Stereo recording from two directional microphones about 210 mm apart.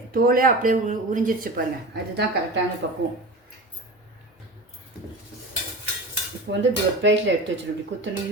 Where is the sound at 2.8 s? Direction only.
50° right (ahead or behind).